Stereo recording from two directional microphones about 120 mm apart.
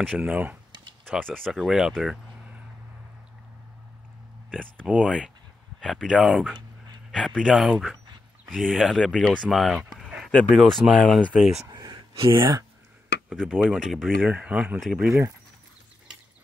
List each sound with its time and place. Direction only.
0.2 s speech: 15° right (ahead or behind)
0.7 s a sound: 40° right (ahead or behind)
1.0 s speech: 5° left (ahead or behind)
4.8 s speech: 10° right (ahead or behind)
5.8 s speech: 5° left (ahead or behind)
9.4 s a sound: centre (ahead or behind)
10.5 s speech: centre (ahead or behind)
11.7 s gasp: 40° right (ahead or behind)
13.3 s speech: centre (ahead or behind)
14.3 s speech: 10° right (ahead or behind)